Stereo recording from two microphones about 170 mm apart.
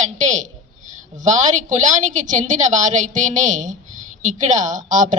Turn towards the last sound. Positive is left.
turn(degrees=-45)  # may be behind; listen again after turning